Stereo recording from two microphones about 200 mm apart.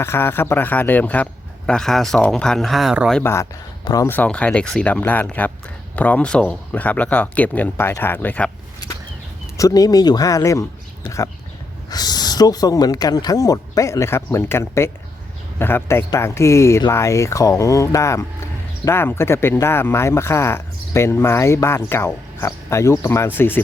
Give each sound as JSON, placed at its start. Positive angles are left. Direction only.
{"t": 0.0, "sound": "speech", "side_deg": 10}
{"t": 3.2, "sound": "speech", "side_deg": 15}
{"t": 9.6, "sound": "speech", "side_deg": 15}
{"t": 11.9, "sound": "speech", "side_deg": 20}